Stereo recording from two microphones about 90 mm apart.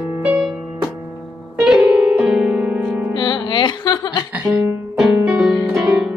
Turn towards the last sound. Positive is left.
turn(degrees=-10)  # may be behind; listen again after turning